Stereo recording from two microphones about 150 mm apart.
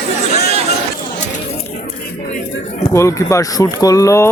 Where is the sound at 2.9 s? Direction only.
20° left (ahead or behind).